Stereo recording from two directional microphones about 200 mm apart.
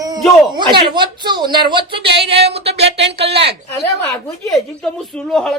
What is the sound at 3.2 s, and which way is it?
Speech, 30° right (ahead or behind).